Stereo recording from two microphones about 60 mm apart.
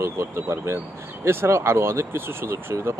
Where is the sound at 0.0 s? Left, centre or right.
Right.